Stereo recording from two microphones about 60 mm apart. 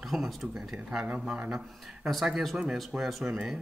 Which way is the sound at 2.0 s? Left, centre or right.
Centre.